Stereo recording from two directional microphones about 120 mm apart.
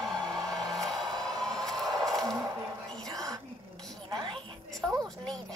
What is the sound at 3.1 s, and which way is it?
Whispering, 30° right (ahead or behind).